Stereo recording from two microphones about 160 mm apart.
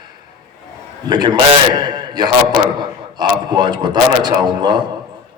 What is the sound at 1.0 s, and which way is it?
A man's voice, 25° right (ahead or behind).